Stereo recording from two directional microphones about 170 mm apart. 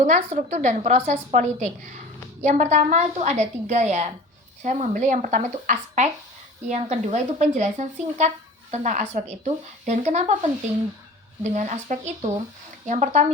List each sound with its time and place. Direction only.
0.0 s a woman's voice: 45° right (ahead or behind)
11.4 s a woman's voice: 45° right (ahead or behind)